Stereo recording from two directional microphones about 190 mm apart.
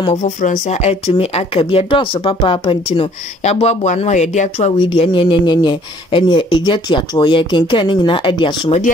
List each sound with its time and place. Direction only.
0.0 s speech: 35° left (ahead or behind)